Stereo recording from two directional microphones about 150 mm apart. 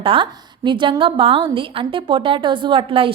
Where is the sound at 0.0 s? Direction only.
35° right (ahead or behind).